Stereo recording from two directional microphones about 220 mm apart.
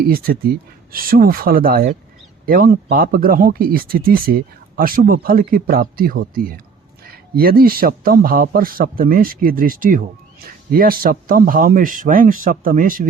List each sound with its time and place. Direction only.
0.0 s speech: 45° right (ahead or behind)